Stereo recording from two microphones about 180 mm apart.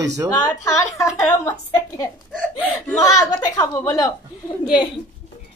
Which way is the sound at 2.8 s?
15° left (ahead or behind).